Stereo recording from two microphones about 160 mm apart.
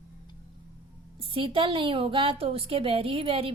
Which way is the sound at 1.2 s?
35° right (ahead or behind).